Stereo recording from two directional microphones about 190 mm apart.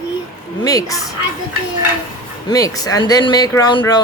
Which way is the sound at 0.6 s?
20° left (ahead or behind).